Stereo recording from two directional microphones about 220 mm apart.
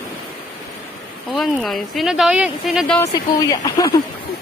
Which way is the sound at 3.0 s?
15° left (ahead or behind).